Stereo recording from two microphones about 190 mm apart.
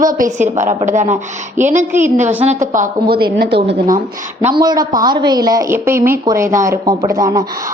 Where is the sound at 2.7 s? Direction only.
50° right (ahead or behind).